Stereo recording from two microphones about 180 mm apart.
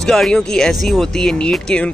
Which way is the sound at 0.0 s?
Centre (ahead or behind).